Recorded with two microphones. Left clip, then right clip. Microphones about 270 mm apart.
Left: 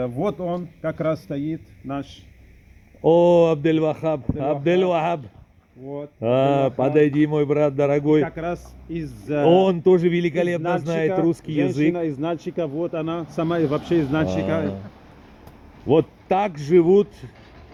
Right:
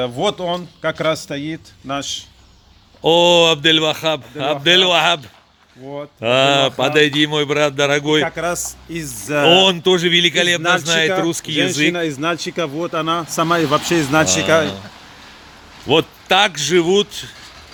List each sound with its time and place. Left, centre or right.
0.0 s a man's voice: right
1.9 s speech: right
3.0 s a man's voice: centre
8.2 s speech: right
9.6 s a man's voice: centre
10.6 s speech: right
10.8 s a man's voice: centre
11.5 s speech: right
15.9 s a man's voice: centre